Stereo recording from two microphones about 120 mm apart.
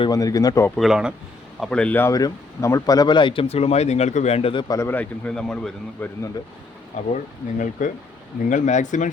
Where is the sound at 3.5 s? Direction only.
60° left (ahead or behind).